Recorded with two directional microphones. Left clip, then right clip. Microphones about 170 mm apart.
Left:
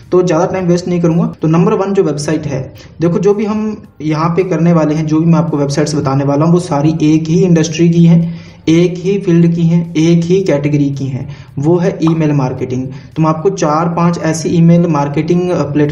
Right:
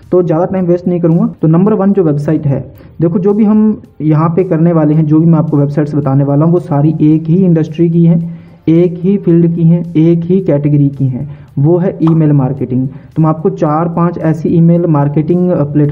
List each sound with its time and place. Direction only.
0.1 s speech: 35° right (ahead or behind)